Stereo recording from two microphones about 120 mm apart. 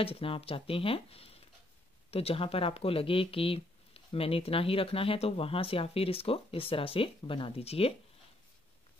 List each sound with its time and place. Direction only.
0.0 s speech: 50° left (ahead or behind)